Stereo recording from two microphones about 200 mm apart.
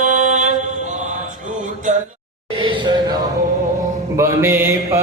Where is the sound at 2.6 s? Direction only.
25° right (ahead or behind).